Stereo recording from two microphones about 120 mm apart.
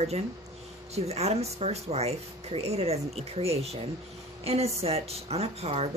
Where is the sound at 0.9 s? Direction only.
60° right (ahead or behind).